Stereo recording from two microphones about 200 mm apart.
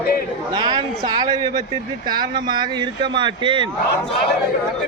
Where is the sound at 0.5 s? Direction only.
20° right (ahead or behind).